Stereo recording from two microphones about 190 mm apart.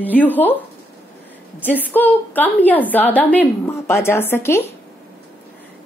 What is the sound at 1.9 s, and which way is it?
A woman's voice, 10° left (ahead or behind).